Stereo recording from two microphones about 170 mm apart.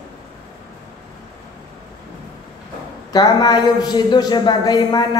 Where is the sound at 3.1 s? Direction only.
25° left (ahead or behind).